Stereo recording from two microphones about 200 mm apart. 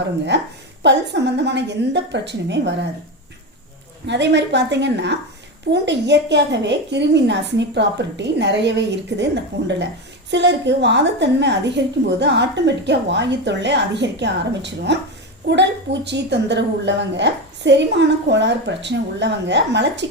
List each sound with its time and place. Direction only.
0.3 s a woman's voice: 60° right (ahead or behind)
4.0 s a woman's voice: 60° right (ahead or behind)